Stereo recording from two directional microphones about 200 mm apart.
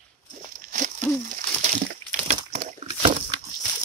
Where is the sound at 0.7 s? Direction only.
40° right (ahead or behind).